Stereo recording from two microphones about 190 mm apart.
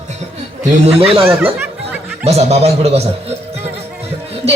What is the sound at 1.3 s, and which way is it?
Music, 10° right (ahead or behind).